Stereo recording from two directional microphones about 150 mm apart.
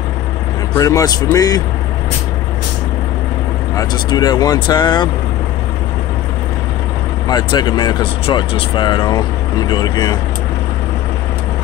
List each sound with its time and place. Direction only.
0.7 s speech: 25° left (ahead or behind)
3.7 s speech: 25° left (ahead or behind)
7.2 s speech: 25° left (ahead or behind)